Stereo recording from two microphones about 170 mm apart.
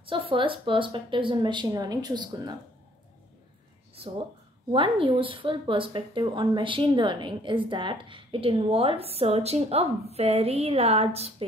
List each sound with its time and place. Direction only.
0.0 s speech: 30° right (ahead or behind)
4.7 s speech: 30° right (ahead or behind)